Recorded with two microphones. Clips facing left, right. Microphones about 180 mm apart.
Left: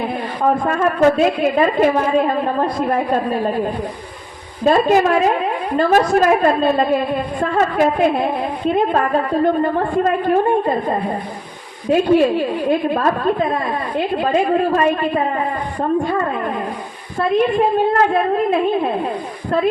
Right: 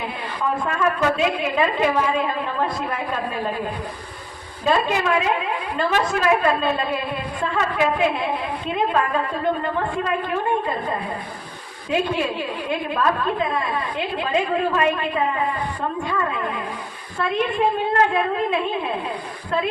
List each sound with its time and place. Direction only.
0.4 s a woman's voice: 40° left (ahead or behind)
4.6 s a woman's voice: 45° left (ahead or behind)
18.1 s a woman's voice: 40° left (ahead or behind)